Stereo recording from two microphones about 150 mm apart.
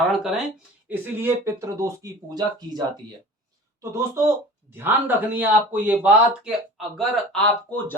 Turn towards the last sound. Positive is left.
turn(degrees=10)  # may be behind; listen again after turning